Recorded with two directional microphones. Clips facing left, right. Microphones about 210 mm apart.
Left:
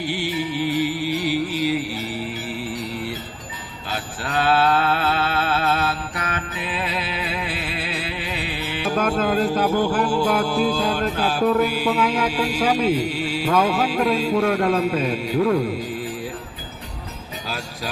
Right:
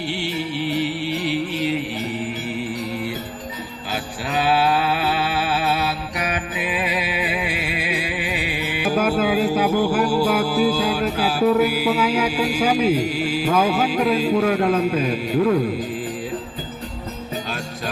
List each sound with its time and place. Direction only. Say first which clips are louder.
0.0 s music: left 1 dB; 45° left (ahead or behind)
2.5 s music: right 2 dB; 5° left (ahead or behind)
3.9 s mantra: right 1 dB; 5° right (ahead or behind)
4.9 s music: even; 15° right (ahead or behind)